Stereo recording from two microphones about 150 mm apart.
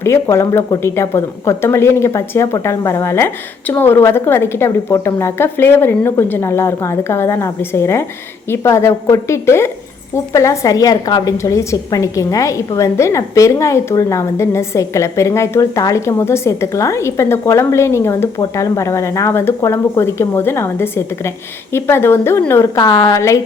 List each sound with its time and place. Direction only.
0.0 s a woman's voice: 20° left (ahead or behind)